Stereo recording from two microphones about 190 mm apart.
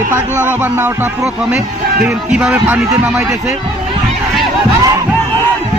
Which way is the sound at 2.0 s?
5° right (ahead or behind).